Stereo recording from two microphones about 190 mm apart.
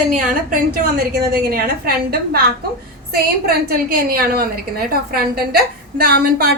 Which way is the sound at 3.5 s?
50° right (ahead or behind).